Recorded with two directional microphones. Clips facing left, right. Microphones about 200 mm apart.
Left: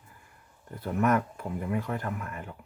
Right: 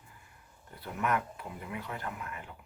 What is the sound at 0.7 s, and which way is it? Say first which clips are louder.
Speech: left 7 dB; 45° left (ahead or behind).